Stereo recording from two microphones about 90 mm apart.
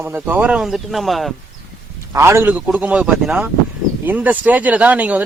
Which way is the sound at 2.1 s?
30° right (ahead or behind).